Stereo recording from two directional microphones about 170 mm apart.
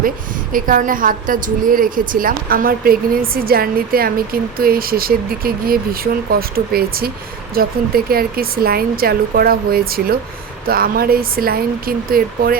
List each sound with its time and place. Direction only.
0.5 s a woman's voice: 55° right (ahead or behind)